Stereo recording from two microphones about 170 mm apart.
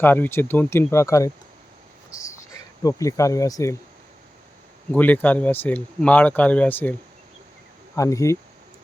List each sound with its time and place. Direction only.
0.0 s speech: 10° left (ahead or behind)
2.0 s cricket: 20° left (ahead or behind)
4.9 s speech: 10° left (ahead or behind)
7.9 s speech: 20° left (ahead or behind)